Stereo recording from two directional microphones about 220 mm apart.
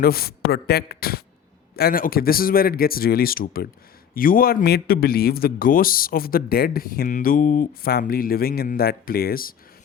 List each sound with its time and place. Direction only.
0.0 s a man's voice: 45° left (ahead or behind)